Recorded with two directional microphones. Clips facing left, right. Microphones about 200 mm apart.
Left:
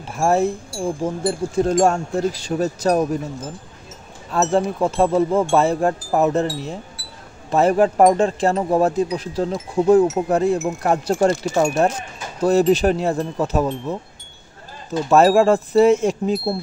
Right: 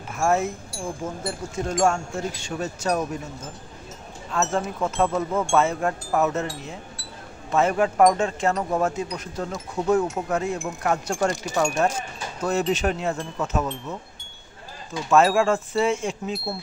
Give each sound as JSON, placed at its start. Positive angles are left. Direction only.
{"t": 0.1, "sound": "speech", "side_deg": 35}
{"t": 4.3, "sound": "speech", "side_deg": 35}
{"t": 7.0, "sound": "a sound", "side_deg": 5}
{"t": 7.5, "sound": "speech", "side_deg": 35}